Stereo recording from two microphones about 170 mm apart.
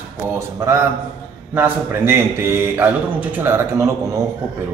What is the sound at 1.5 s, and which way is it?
Speech, 15° right (ahead or behind).